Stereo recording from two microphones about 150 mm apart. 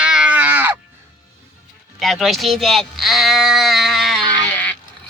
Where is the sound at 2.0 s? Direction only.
Centre (ahead or behind).